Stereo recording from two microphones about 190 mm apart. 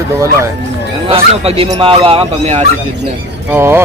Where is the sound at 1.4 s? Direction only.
30° right (ahead or behind).